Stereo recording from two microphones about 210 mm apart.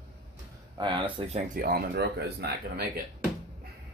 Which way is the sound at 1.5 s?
45° right (ahead or behind).